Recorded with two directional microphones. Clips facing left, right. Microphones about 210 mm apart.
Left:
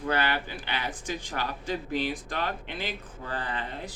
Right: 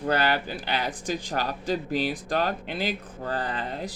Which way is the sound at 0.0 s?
40° right (ahead or behind).